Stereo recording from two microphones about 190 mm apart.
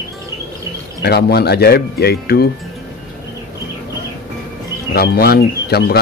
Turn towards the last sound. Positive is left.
turn(degrees=55)  # may be behind; listen again after turning